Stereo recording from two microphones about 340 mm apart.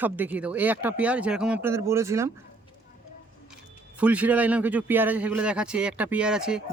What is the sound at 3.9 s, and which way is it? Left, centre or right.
Speech, centre.